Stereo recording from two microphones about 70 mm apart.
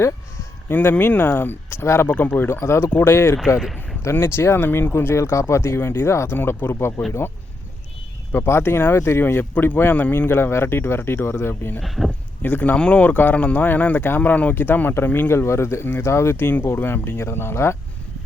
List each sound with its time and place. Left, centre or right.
0.7 s speech: left
2.1 s speech: left
3.6 s speech: centre
4.0 s speech: left
8.3 s speech: left
11.8 s speech: centre
12.4 s speech: left